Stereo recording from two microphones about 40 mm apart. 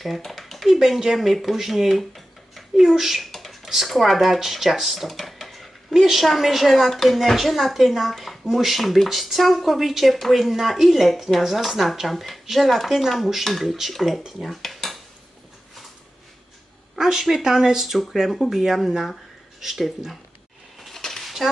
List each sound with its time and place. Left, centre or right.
0.0 s a sound: centre
0.8 s speech: centre
3.2 s a sound: centre
3.8 s speech: centre
5.9 s speech: centre
14.3 s dishes: centre
17.0 s speech: centre
20.8 s dishes: centre
21.2 s a sound: centre